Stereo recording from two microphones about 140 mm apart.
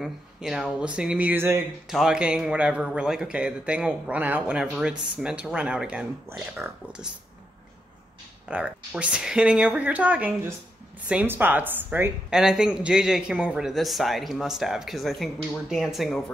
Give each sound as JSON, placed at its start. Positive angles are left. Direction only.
{"t": 0.0, "sound": "a man's voice", "side_deg": -5}
{"t": 1.9, "sound": "a man's voice", "side_deg": -5}
{"t": 6.3, "sound": "speech", "side_deg": -20}
{"t": 8.5, "sound": "a man's voice", "side_deg": -10}